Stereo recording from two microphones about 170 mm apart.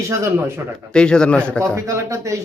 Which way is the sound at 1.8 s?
15° right (ahead or behind).